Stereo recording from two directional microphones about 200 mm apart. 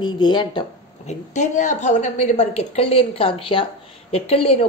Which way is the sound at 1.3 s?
35° left (ahead or behind).